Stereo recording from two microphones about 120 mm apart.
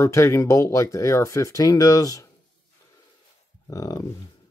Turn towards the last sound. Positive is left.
turn(degrees=30)  # may be behind; listen again after turning